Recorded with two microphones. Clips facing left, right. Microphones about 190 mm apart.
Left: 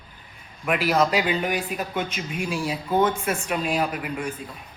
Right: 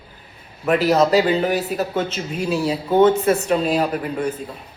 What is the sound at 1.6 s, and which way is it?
Speech, 5° right (ahead or behind).